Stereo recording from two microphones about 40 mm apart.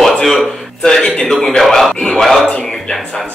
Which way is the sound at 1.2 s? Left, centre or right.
Centre.